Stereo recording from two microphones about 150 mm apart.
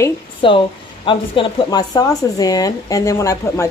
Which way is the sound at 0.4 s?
35° left (ahead or behind).